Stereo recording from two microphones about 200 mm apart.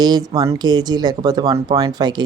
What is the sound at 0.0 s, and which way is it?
Speech, 20° right (ahead or behind).